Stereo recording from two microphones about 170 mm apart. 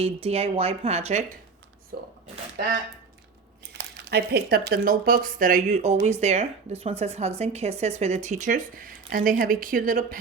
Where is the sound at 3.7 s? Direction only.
70° right (ahead or behind).